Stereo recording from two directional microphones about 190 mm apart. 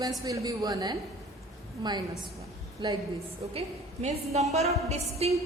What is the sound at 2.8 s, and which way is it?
Speech, 25° right (ahead or behind).